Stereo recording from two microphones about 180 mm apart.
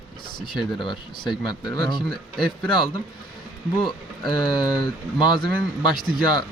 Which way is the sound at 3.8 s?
25° left (ahead or behind).